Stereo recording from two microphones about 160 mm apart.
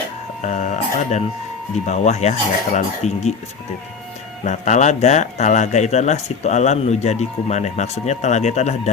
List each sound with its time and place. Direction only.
0.4 s speech: 50° left (ahead or behind)
4.4 s speech: 45° left (ahead or behind)